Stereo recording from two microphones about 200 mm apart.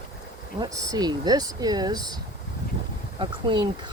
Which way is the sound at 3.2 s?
25° right (ahead or behind).